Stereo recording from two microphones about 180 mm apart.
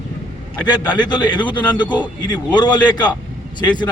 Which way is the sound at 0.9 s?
25° left (ahead or behind).